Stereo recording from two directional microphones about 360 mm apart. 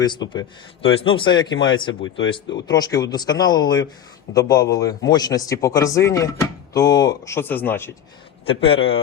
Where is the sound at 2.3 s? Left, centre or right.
Centre.